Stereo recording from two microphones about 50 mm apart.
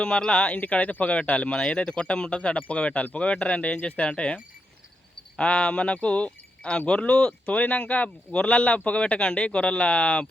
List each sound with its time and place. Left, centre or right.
0.0 s speech: centre
0.5 s speech: left
5.4 s speech: centre